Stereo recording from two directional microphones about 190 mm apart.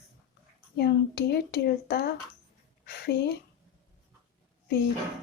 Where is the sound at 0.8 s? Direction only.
55° left (ahead or behind).